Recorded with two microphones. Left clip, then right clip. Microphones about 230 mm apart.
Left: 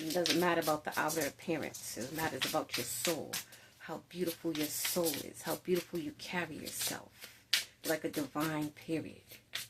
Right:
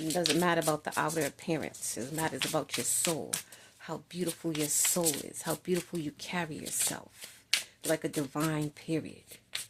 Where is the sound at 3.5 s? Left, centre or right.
Right.